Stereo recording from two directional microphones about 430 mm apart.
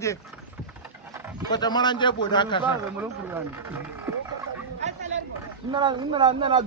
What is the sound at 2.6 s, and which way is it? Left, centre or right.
Speech, centre.